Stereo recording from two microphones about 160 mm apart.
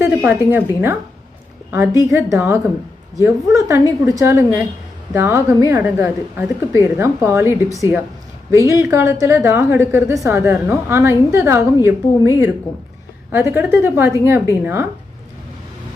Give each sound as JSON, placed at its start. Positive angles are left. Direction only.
{"t": 0.0, "sound": "a woman's voice", "side_deg": -10}